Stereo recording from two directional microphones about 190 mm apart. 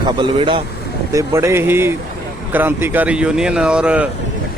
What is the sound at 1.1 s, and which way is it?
Speech, 15° right (ahead or behind).